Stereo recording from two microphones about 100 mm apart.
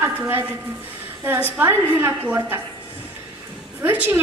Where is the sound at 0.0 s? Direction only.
20° right (ahead or behind).